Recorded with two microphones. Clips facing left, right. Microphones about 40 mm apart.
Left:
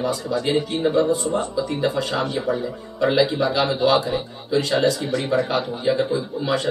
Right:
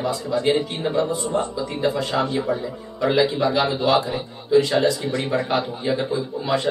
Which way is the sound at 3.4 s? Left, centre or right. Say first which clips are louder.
Even; left.